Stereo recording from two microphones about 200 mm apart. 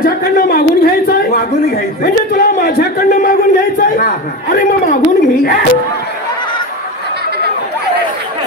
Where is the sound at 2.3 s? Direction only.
50° left (ahead or behind).